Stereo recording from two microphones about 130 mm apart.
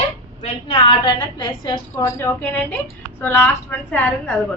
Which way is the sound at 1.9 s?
20° left (ahead or behind).